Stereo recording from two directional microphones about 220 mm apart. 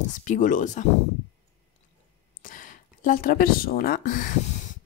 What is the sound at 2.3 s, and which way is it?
Speech, 35° left (ahead or behind).